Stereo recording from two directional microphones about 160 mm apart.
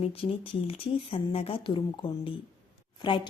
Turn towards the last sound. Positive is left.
turn(degrees=30)  # may be behind; listen again after turning